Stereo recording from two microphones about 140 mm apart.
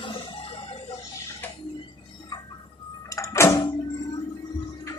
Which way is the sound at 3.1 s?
25° left (ahead or behind).